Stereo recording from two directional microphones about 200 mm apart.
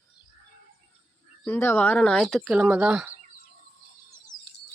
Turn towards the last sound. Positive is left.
turn(degrees=-5)  # may be behind; listen again after turning